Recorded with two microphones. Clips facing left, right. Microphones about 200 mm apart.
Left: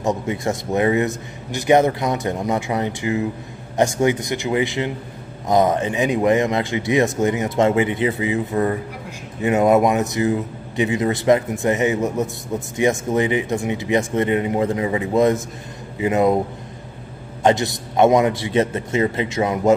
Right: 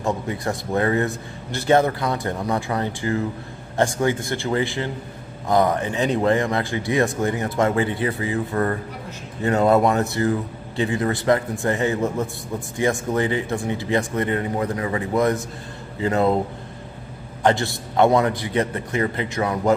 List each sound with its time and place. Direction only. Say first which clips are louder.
0.0 s a man's voice: left 3 dB; 20° left (ahead or behind)
17.4 s speech: left 2 dB; 20° left (ahead or behind)